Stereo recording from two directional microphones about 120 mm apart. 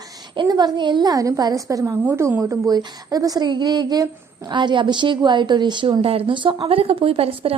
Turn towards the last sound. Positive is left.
turn(degrees=-50)  # may be behind; listen again after turning